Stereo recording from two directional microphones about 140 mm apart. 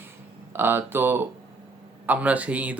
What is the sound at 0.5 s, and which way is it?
Speech, 15° right (ahead or behind).